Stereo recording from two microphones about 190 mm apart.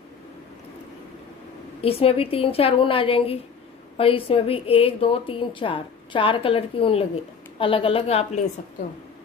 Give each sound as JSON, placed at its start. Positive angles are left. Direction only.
{"t": 1.8, "sound": "a woman's voice", "side_deg": 30}